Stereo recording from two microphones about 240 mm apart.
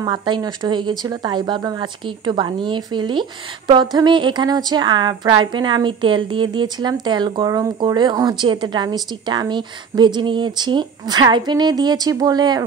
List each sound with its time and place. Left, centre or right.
0.0 s speech: centre